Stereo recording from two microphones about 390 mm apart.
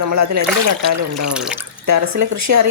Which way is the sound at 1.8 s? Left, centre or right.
Right.